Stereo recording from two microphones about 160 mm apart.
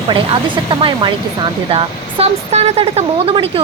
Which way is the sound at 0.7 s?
30° right (ahead or behind).